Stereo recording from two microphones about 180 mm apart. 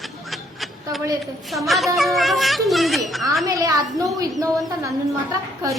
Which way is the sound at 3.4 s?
20° right (ahead or behind).